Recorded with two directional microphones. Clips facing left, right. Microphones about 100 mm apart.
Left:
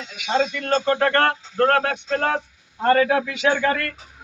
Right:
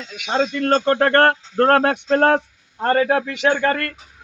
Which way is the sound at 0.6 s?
50° right (ahead or behind).